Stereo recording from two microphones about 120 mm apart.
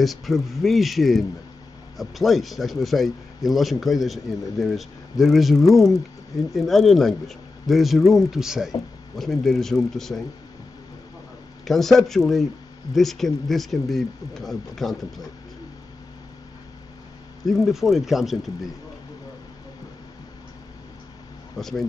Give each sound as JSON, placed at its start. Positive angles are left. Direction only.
{"t": 0.0, "sound": "speech", "side_deg": 0}
{"t": 11.6, "sound": "speech", "side_deg": 0}
{"t": 17.5, "sound": "speech", "side_deg": 0}
{"t": 21.5, "sound": "speech", "side_deg": 0}